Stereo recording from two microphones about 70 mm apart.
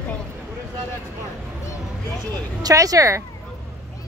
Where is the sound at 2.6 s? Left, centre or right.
Right.